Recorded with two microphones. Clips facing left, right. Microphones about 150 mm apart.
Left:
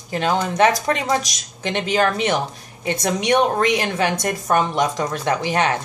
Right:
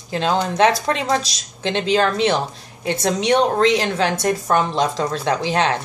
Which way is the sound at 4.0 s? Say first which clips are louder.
Right 2 dB; 15° left (ahead or behind).